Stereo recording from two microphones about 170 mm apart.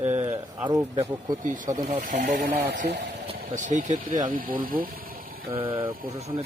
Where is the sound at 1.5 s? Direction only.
45° right (ahead or behind).